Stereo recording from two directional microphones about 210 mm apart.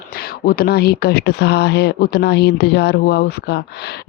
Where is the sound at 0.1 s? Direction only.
45° left (ahead or behind).